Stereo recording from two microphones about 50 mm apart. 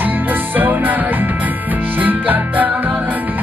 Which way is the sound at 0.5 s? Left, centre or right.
Right.